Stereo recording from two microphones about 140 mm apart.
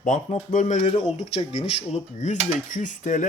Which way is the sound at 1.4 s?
45° left (ahead or behind).